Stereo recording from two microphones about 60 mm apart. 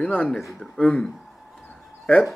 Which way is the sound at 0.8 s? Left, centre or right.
Centre.